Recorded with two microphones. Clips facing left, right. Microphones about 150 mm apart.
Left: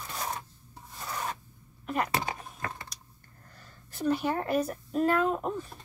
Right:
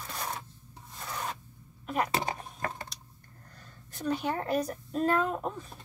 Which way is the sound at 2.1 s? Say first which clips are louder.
Even; 35° right (ahead or behind).